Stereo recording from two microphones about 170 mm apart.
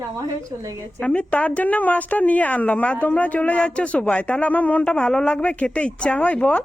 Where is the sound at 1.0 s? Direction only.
10° left (ahead or behind).